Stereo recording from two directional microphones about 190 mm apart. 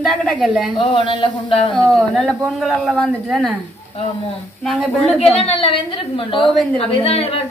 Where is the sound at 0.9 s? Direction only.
25° left (ahead or behind).